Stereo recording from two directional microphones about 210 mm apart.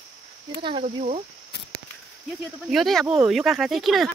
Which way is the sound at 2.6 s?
Centre (ahead or behind).